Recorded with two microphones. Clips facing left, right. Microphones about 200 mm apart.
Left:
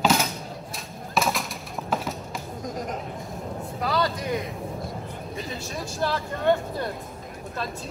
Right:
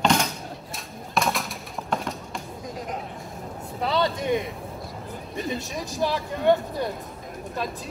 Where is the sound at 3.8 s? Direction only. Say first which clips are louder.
Right 2 dB; 25° right (ahead or behind).